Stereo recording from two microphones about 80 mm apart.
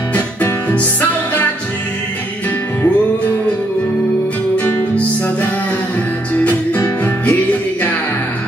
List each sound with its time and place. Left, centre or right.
0.1 s music: left
4.6 s music: centre